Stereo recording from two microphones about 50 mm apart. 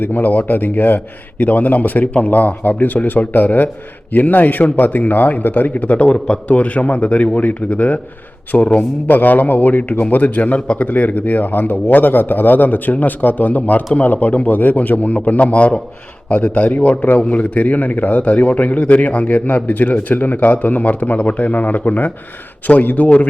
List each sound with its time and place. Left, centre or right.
0.0 s a man's voice: left